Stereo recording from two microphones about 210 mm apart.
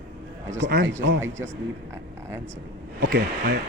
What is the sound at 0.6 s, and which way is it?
Speech, 45° right (ahead or behind).